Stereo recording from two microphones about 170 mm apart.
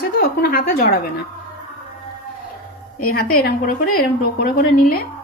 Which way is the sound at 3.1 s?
60° left (ahead or behind).